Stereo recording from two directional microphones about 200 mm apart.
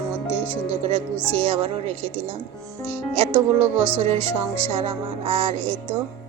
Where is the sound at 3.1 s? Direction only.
30° right (ahead or behind).